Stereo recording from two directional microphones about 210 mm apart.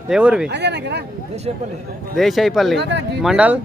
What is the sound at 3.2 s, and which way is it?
Speech, 5° right (ahead or behind).